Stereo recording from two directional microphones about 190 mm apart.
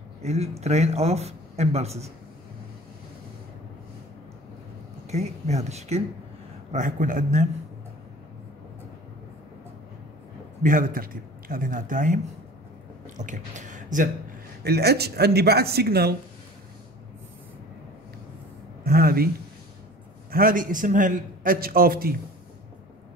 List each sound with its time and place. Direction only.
0.2 s speech: 35° right (ahead or behind)
5.0 s a man's voice: 35° right (ahead or behind)
10.6 s a man's voice: 45° right (ahead or behind)
14.6 s speech: 55° right (ahead or behind)
18.9 s a sound: 50° right (ahead or behind)
20.2 s a man's voice: 50° right (ahead or behind)